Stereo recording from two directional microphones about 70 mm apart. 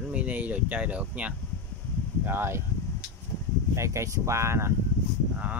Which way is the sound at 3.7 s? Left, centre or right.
Right.